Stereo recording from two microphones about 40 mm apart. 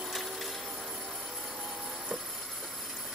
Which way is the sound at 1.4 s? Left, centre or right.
Centre.